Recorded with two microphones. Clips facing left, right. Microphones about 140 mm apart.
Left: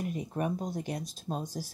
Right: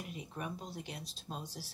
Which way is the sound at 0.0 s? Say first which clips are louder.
Left 10 dB; 45° left (ahead or behind).